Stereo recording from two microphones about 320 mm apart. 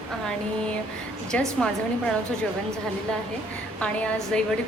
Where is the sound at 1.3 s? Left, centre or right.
Centre.